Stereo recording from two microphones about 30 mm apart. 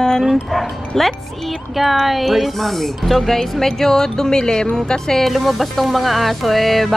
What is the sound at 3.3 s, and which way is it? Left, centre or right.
Speech, centre.